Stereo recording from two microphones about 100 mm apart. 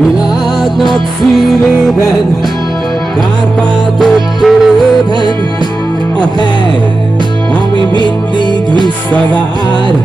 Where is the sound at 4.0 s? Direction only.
Centre (ahead or behind).